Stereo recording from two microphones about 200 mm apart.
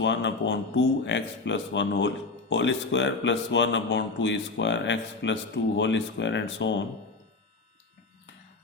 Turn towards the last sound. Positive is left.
turn(degrees=60)  # may be behind; listen again after turning